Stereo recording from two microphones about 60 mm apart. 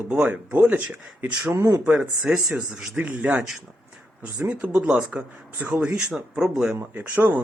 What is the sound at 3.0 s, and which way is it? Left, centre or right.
Speech, right.